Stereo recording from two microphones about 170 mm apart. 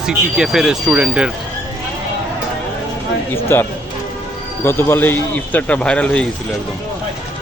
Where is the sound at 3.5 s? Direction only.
15° left (ahead or behind).